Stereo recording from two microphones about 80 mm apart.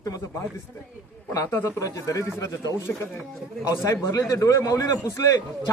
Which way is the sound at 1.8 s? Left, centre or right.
Left.